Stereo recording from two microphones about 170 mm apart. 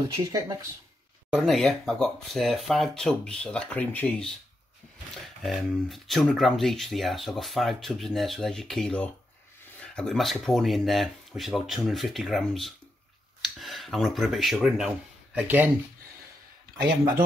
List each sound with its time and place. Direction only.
0.1 s speech: 20° right (ahead or behind)
1.3 s speech: centre (ahead or behind)
5.4 s speech: centre (ahead or behind)